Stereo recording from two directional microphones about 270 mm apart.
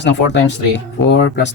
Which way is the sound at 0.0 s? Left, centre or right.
Left.